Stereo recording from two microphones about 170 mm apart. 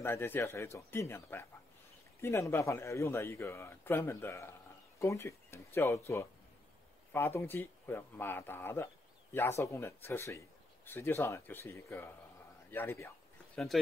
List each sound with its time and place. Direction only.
0.0 s speech: 15° left (ahead or behind)